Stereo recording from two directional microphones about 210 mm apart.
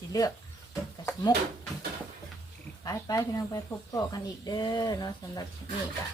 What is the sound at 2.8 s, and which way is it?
Speech, 15° left (ahead or behind).